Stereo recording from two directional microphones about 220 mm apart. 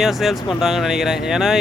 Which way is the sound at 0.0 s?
Centre (ahead or behind).